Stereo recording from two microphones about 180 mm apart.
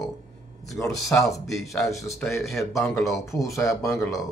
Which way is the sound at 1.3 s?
Centre (ahead or behind).